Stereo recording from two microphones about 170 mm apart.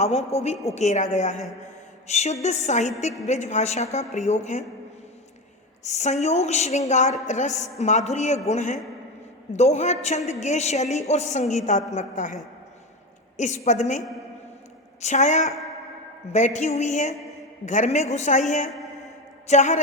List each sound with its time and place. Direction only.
0.3 s a woman's voice: 40° left (ahead or behind)
5.8 s a woman's voice: 40° left (ahead or behind)
15.0 s a woman's voice: 45° left (ahead or behind)
18.7 s a sound: centre (ahead or behind)
19.5 s a woman's voice: 45° left (ahead or behind)